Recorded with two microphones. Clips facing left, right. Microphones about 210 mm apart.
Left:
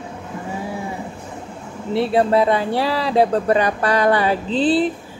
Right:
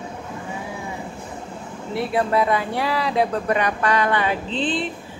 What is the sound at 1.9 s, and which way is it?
Speech, 30° left (ahead or behind).